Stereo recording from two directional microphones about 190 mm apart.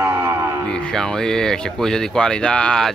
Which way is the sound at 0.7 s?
5° left (ahead or behind).